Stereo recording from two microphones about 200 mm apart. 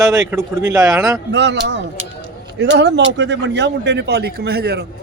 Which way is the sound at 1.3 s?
60° right (ahead or behind).